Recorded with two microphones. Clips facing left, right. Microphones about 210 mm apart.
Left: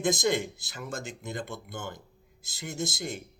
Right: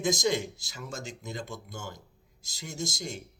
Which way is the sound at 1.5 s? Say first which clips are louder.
Left 2 dB; 60° left (ahead or behind).